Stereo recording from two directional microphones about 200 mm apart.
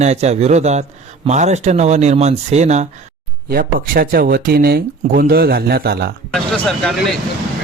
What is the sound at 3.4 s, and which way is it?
Speech, 50° right (ahead or behind).